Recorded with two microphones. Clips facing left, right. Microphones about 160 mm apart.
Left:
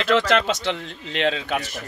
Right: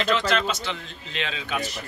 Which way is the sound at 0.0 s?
80° left.